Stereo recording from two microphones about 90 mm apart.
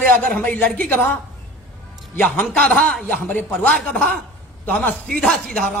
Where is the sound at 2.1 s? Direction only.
20° left (ahead or behind).